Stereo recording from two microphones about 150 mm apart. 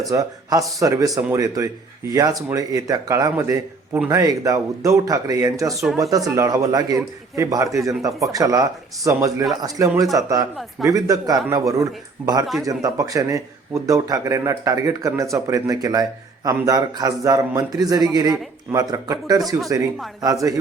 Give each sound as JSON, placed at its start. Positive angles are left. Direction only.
{"t": 0.0, "sound": "a man's voice", "side_deg": -25}